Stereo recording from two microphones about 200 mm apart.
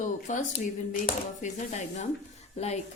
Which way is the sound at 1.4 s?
35° left (ahead or behind).